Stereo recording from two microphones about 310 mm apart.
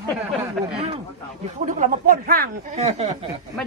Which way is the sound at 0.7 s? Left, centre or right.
Centre.